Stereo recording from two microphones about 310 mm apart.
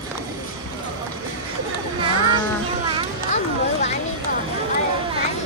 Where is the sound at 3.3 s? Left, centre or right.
Left.